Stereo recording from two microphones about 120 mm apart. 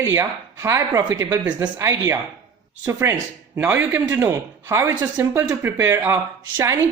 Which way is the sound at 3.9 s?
25° right (ahead or behind).